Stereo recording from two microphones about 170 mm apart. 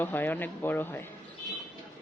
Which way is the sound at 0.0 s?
10° left (ahead or behind).